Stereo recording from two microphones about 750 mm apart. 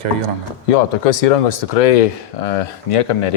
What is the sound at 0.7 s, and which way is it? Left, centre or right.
Speech, left.